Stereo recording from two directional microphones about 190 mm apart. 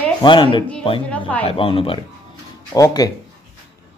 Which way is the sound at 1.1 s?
5° left (ahead or behind).